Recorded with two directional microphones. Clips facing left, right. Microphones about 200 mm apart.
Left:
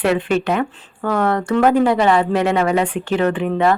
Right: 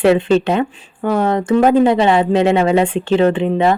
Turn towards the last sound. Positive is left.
turn(degrees=-25)  # may be behind; listen again after turning